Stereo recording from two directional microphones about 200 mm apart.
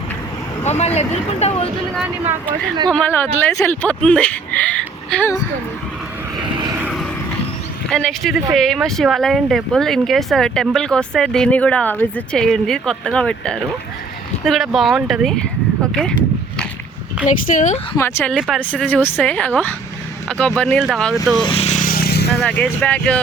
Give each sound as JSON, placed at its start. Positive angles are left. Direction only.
{"t": 0.6, "sound": "speech", "side_deg": 35}
{"t": 2.9, "sound": "speech", "side_deg": 10}
{"t": 7.9, "sound": "speech", "side_deg": 5}
{"t": 17.2, "sound": "speech", "side_deg": 40}
{"t": 17.9, "sound": "speech", "side_deg": 10}
{"t": 18.3, "sound": "speech", "side_deg": 0}
{"t": 21.4, "sound": "vehicle", "side_deg": 30}
{"t": 22.4, "sound": "speech", "side_deg": 5}